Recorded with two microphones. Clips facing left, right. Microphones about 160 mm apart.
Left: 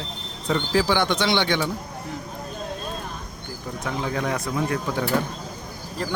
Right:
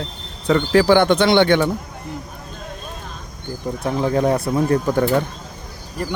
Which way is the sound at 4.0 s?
35° right (ahead or behind).